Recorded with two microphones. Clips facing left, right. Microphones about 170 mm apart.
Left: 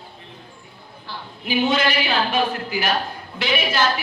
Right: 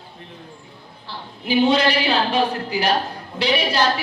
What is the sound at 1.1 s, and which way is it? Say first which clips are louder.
A woman's voice: right 3 dB; 30° right (ahead or behind).